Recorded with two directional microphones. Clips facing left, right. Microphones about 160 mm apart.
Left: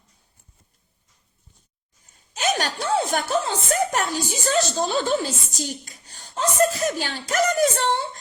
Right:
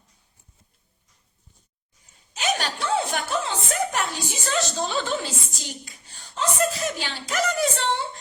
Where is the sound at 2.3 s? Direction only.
45° left (ahead or behind).